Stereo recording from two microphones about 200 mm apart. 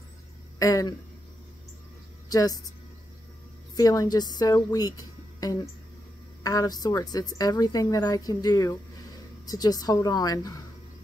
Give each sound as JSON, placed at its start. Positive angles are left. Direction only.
{"t": 0.6, "sound": "speech", "side_deg": 15}
{"t": 2.2, "sound": "speech", "side_deg": 20}
{"t": 3.7, "sound": "a woman's voice", "side_deg": 15}